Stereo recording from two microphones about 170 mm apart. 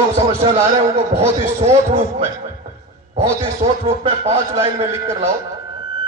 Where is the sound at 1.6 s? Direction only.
40° right (ahead or behind).